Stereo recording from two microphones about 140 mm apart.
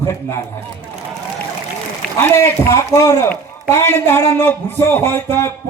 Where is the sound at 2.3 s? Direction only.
15° left (ahead or behind).